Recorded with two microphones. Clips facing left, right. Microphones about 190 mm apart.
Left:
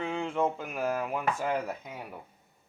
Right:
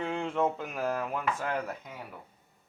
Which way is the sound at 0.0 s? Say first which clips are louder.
Even; centre (ahead or behind).